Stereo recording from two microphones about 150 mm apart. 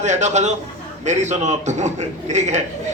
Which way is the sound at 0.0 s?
50° right (ahead or behind).